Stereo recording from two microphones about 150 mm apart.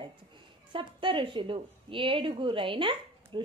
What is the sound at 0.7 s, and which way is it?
A woman's voice, 35° right (ahead or behind).